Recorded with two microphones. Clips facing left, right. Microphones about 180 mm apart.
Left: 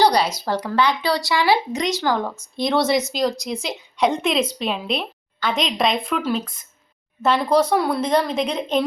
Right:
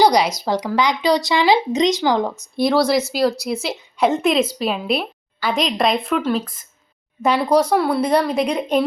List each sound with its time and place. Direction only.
0.0 s speech: 10° right (ahead or behind)
2.6 s a woman's voice: 5° right (ahead or behind)
7.2 s speech: 10° right (ahead or behind)